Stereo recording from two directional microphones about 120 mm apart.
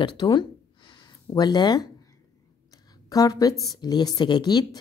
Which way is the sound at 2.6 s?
30° left (ahead or behind).